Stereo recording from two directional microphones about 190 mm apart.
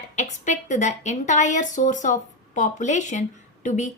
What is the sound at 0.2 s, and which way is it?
A woman's voice, 40° left (ahead or behind).